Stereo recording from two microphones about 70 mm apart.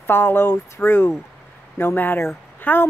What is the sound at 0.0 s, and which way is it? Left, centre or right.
Speech, left.